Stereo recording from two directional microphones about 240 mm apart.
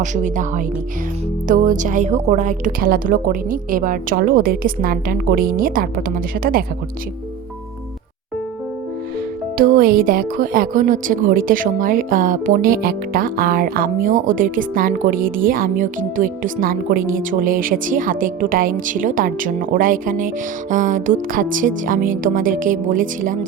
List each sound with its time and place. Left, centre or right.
0.0 s speech: right
9.6 s speech: right